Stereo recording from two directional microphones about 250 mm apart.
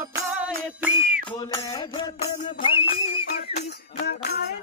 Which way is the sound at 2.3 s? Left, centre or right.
Left.